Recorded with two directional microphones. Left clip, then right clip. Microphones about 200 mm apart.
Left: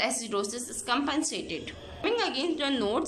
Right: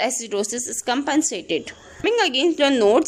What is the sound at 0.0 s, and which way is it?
A woman's voice, 40° right (ahead or behind).